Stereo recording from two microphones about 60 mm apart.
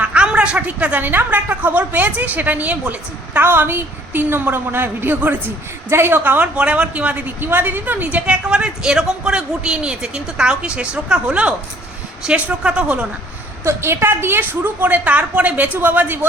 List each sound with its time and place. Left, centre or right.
0.0 s a woman's voice: centre
5.9 s a woman's voice: right
6.6 s a woman's voice: centre
13.7 s a woman's voice: right